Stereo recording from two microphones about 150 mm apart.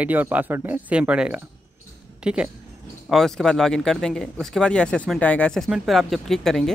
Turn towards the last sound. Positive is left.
turn(degrees=0)  # may be behind; listen again after turning